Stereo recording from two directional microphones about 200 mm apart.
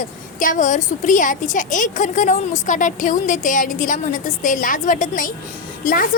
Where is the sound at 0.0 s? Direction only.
40° left (ahead or behind).